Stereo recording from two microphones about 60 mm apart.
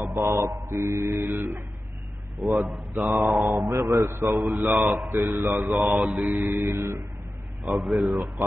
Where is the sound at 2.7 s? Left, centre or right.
Centre.